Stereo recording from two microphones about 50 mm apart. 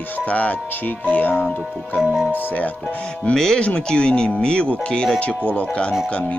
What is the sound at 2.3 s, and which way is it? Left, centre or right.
Speech, left.